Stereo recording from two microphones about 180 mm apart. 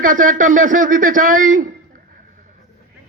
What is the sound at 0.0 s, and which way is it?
A man's voice, 50° right (ahead or behind).